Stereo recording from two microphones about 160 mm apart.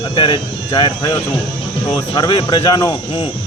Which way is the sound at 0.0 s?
30° left (ahead or behind).